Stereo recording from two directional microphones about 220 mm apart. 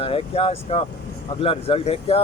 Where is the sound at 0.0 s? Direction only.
25° left (ahead or behind).